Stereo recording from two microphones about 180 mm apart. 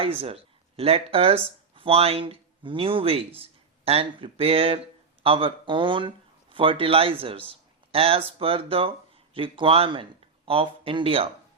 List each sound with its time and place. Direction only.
0.0 s a man's voice: 30° right (ahead or behind)